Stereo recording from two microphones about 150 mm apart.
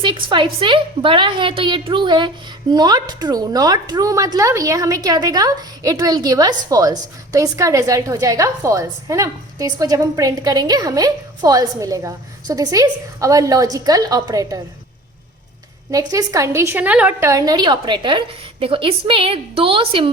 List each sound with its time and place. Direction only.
0.0 s a woman's voice: 30° right (ahead or behind)
15.9 s a woman's voice: 25° right (ahead or behind)